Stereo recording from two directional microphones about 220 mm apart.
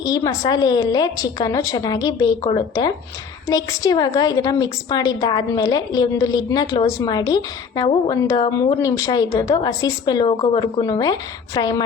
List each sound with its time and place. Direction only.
0.0 s a woman's voice: 15° left (ahead or behind)